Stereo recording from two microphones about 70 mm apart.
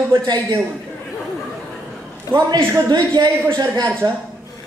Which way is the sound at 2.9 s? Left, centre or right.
Right.